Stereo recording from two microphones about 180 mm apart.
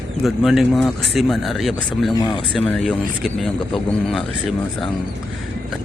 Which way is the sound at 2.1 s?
20° left (ahead or behind).